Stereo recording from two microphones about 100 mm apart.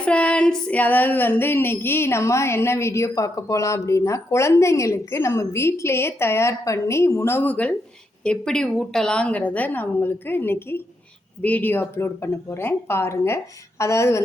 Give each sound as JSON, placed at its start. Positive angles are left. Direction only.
{"t": 0.0, "sound": "female singing", "side_deg": 15}
{"t": 8.2, "sound": "a woman's voice", "side_deg": 10}
{"t": 11.4, "sound": "female singing", "side_deg": 15}